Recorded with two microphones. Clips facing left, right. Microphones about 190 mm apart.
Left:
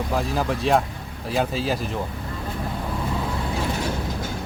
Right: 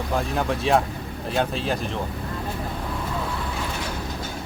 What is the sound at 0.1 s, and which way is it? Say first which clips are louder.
Speech: right 1 dB; centre (ahead or behind).